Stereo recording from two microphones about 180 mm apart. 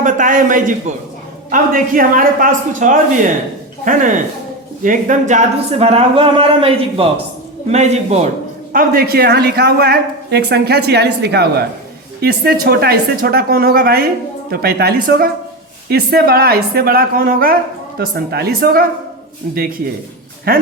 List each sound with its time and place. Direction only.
0.0 s a man's voice: 45° right (ahead or behind)
8.7 s speech: 50° right (ahead or behind)
20.5 s speech: 55° right (ahead or behind)